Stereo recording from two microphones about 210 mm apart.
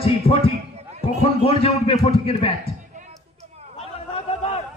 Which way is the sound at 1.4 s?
30° left (ahead or behind).